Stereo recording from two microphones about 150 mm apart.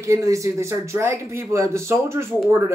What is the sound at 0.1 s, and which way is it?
A man's voice, 20° right (ahead or behind).